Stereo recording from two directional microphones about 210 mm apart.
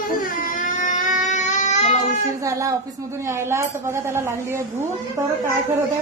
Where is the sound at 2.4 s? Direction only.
15° right (ahead or behind).